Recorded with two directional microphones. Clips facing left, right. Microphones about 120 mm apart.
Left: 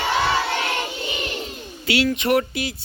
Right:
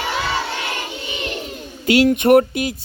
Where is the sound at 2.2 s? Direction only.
50° right (ahead or behind).